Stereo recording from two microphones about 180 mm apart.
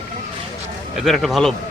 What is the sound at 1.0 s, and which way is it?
Speech, centre (ahead or behind).